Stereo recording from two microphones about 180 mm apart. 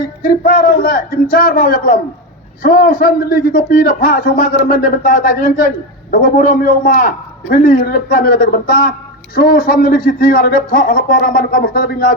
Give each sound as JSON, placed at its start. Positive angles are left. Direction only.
{"t": 0.2, "sound": "a man's voice", "side_deg": 60}